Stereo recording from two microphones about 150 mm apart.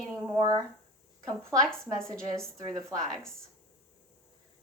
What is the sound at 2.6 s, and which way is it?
Speech, 30° right (ahead or behind).